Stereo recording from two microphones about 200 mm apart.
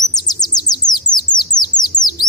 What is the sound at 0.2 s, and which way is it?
Bird, 20° left (ahead or behind).